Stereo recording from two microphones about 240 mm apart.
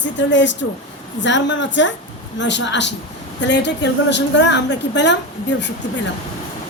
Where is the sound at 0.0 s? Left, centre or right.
Left.